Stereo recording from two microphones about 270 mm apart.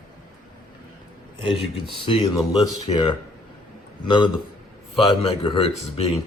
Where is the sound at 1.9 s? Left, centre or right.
Centre.